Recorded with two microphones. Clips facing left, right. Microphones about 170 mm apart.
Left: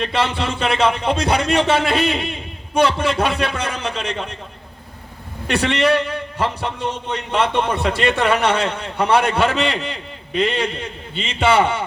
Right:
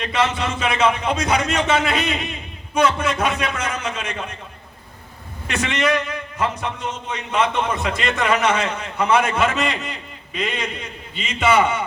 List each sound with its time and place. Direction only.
0.0 s a man's voice: 30° left (ahead or behind)
5.5 s a man's voice: 35° left (ahead or behind)